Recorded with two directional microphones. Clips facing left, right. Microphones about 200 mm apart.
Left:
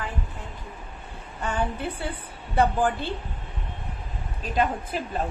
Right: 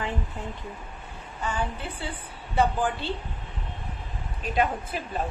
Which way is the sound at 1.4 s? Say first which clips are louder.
Left 3 dB; 60° left (ahead or behind).